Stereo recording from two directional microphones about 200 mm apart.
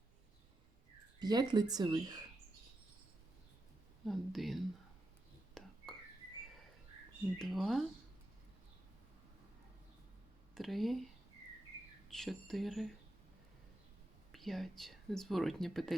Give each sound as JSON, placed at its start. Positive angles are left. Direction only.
{"t": 1.2, "sound": "speech", "side_deg": -20}
{"t": 4.0, "sound": "speech", "side_deg": 0}
{"t": 5.6, "sound": "whispering", "side_deg": 0}
{"t": 7.3, "sound": "speech", "side_deg": 0}
{"t": 10.5, "sound": "speech", "side_deg": 0}
{"t": 12.0, "sound": "speech", "side_deg": 0}
{"t": 14.3, "sound": "speech", "side_deg": 0}